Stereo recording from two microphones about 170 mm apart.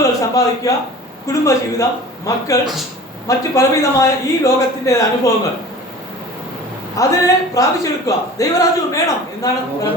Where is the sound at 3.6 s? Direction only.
20° left (ahead or behind).